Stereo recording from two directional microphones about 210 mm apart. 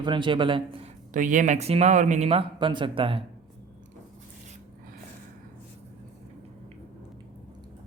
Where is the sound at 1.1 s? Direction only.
40° right (ahead or behind).